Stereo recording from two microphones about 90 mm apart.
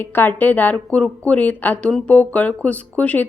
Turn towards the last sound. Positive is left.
turn(degrees=15)  # may be behind; listen again after turning